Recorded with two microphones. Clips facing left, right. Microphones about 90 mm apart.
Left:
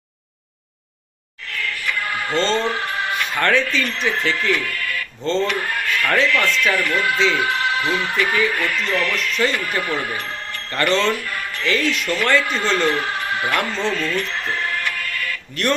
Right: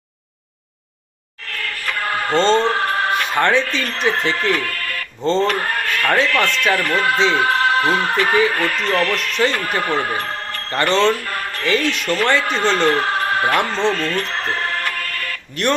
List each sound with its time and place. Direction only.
1.5 s music: 45° right (ahead or behind)
3.8 s speech: 45° right (ahead or behind)
12.2 s speech: 25° right (ahead or behind)
13.6 s speech: 25° right (ahead or behind)
13.9 s music: 45° right (ahead or behind)